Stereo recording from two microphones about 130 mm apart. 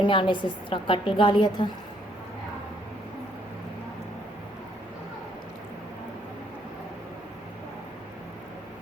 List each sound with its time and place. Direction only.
0.0 s a woman's voice: 40° left (ahead or behind)